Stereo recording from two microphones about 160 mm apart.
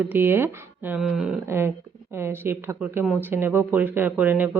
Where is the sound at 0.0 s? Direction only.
10° right (ahead or behind).